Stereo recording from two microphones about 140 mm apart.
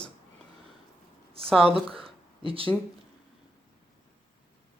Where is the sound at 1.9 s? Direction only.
40° right (ahead or behind).